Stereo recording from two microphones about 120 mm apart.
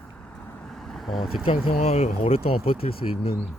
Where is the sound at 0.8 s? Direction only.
Centre (ahead or behind).